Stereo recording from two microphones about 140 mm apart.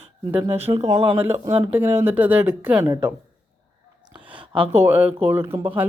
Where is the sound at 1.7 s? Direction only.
15° right (ahead or behind).